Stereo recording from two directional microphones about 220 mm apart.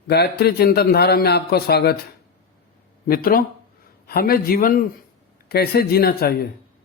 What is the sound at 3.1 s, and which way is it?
A man's voice, 40° left (ahead or behind).